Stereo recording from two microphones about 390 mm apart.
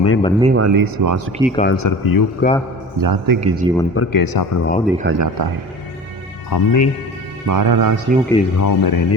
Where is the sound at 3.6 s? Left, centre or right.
Centre.